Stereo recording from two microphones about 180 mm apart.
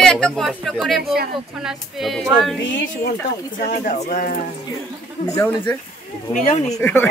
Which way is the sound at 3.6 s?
45° left (ahead or behind).